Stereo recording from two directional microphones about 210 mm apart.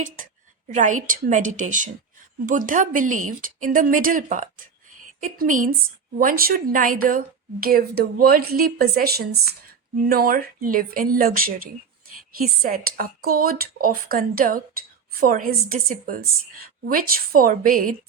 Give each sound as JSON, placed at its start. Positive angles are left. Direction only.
{"t": 0.7, "sound": "a woman's voice", "side_deg": -35}